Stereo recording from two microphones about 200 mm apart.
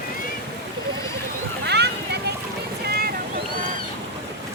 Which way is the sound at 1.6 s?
55° right (ahead or behind).